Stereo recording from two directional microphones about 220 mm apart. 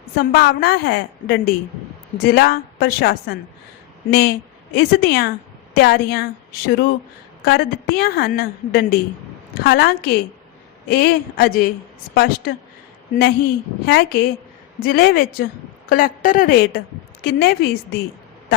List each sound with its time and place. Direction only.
0.2 s a woman's voice: 45° left (ahead or behind)
4.7 s a woman's voice: 45° left (ahead or behind)